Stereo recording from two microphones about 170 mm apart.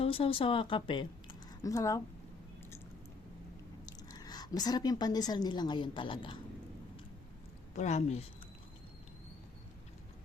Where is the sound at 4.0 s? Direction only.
25° left (ahead or behind).